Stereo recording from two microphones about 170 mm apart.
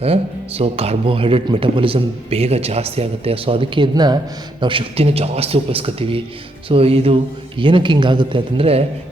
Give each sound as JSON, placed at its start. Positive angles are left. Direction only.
{"t": 0.0, "sound": "speech", "side_deg": -35}